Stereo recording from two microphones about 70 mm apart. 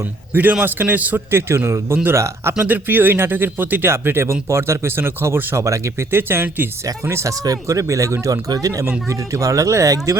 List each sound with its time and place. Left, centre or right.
0.0 s speech: right
1.3 s speech: right
2.6 s speech: right
5.5 s speech: right
7.3 s speech: right
8.4 s speech: right
9.0 s speech: right